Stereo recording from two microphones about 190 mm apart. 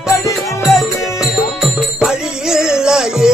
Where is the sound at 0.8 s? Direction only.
Centre (ahead or behind).